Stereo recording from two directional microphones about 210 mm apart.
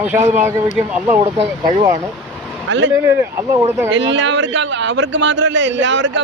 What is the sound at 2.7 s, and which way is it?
Speech, 60° right (ahead or behind).